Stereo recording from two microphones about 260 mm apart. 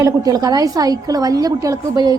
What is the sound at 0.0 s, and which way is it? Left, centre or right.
A woman's voice, centre.